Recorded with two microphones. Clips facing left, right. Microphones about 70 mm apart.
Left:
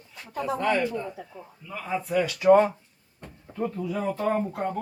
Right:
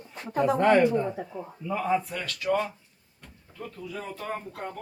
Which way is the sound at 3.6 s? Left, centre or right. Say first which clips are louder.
Left 9 dB; left.